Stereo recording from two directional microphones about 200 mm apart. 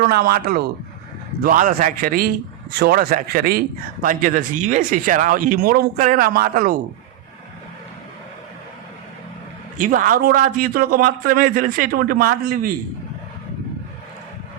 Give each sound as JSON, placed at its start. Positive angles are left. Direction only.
{"t": 0.0, "sound": "a man's voice", "side_deg": -45}
{"t": 9.7, "sound": "a man's voice", "side_deg": -40}